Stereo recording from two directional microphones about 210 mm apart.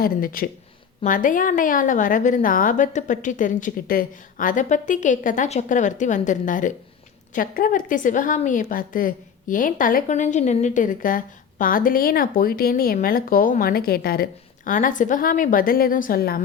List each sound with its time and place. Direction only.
0.0 s a woman's voice: 45° left (ahead or behind)